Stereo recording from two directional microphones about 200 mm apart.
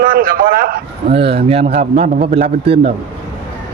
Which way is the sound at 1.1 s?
25° right (ahead or behind).